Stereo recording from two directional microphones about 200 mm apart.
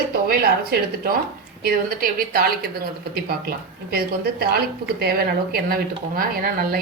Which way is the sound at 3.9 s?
50° right (ahead or behind).